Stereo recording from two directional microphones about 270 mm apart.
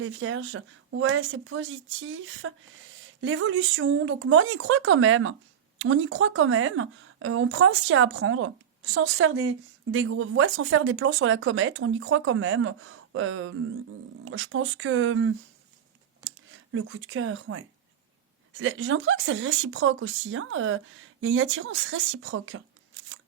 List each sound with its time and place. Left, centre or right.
0.0 s speech: right